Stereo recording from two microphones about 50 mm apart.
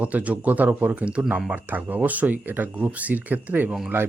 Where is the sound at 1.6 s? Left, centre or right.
Right.